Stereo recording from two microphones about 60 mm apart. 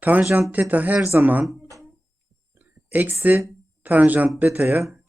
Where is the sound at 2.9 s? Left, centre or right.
Right.